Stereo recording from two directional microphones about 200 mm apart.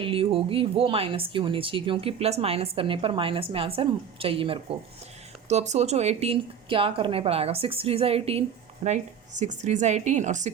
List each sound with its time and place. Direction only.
0.0 s a woman's voice: 25° right (ahead or behind)